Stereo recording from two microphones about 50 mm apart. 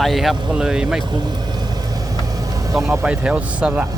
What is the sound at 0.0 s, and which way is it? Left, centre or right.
Speech, centre.